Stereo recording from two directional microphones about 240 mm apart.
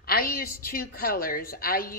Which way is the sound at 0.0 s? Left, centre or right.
Left.